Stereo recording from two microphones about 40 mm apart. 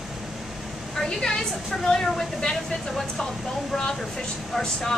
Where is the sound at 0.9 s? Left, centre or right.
Centre.